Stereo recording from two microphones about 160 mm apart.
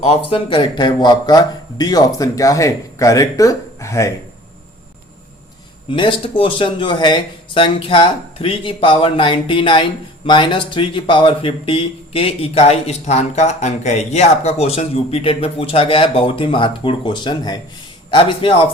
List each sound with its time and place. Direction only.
0.0 s a man's voice: 40° left (ahead or behind); by 4.1 s 20° left (ahead or behind)
5.9 s speech: 30° left (ahead or behind)